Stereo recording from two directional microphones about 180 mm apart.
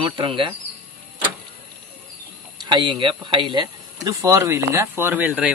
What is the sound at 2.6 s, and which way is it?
Speech, 25° right (ahead or behind).